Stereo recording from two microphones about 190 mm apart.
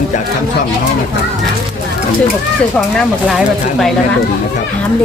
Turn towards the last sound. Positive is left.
turn(degrees=0)  # may be behind; listen again after turning